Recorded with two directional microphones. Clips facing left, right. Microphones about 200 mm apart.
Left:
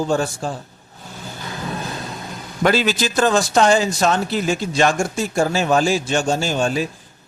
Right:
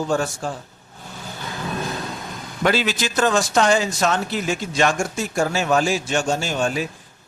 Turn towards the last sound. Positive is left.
turn(degrees=30)  # may be behind; listen again after turning